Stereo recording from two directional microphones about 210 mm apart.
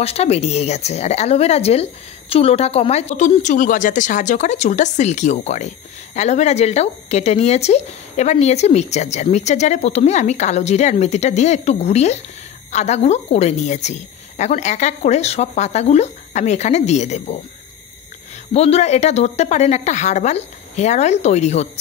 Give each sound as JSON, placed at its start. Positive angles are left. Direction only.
{"t": 0.0, "sound": "speech", "side_deg": 30}
{"t": 18.5, "sound": "speech", "side_deg": 30}